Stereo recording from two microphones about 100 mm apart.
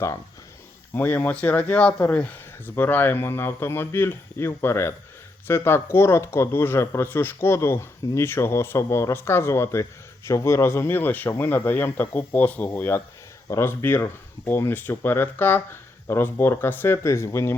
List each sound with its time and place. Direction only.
0.9 s speech: 15° left (ahead or behind)